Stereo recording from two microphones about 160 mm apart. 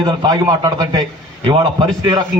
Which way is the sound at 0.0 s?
25° right (ahead or behind).